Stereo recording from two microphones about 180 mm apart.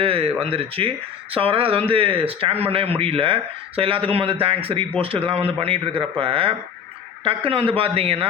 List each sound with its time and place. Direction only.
0.0 s speech: 30° right (ahead or behind)